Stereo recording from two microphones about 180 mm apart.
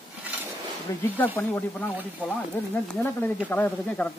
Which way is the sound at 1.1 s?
10° left (ahead or behind).